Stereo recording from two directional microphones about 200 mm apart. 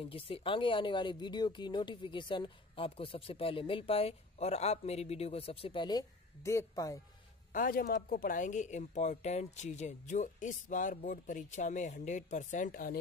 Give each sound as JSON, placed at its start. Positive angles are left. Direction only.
{"t": 0.0, "sound": "speech", "side_deg": 30}
{"t": 7.5, "sound": "speech", "side_deg": 45}